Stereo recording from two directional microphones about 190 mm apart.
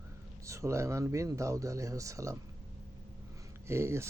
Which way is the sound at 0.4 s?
15° right (ahead or behind).